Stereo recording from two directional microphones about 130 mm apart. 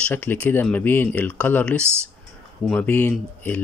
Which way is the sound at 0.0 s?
15° left (ahead or behind).